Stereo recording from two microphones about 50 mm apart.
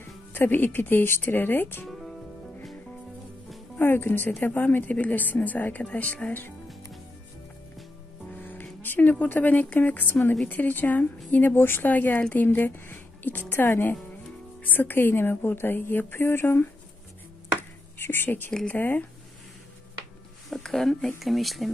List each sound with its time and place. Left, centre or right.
0.3 s speech: left
1.9 s music: centre
3.7 s speech: left
8.4 s music: left
8.8 s a sound: left
9.2 s a woman's voice: left
14.6 s speech: left
17.6 s a sound: left
18.7 s speech: left
20.4 s speech: centre
21.2 s speech: centre